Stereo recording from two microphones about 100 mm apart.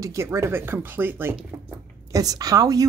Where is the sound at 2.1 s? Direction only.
35° right (ahead or behind).